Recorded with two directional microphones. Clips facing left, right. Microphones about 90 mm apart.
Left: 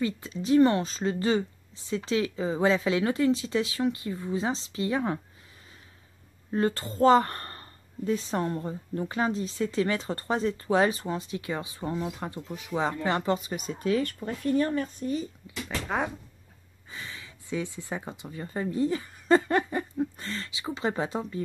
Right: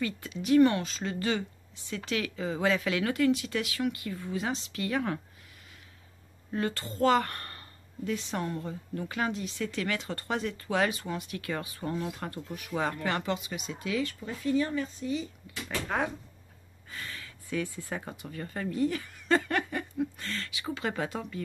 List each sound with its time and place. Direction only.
0.0 s speech: 30° left (ahead or behind)
6.5 s speech: 35° left (ahead or behind)
16.9 s speech: 15° left (ahead or behind)